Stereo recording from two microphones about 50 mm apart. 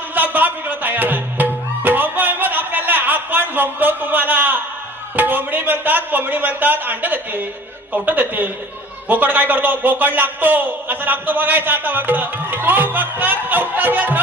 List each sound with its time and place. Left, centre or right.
0.1 s music: right
5.1 s speech: right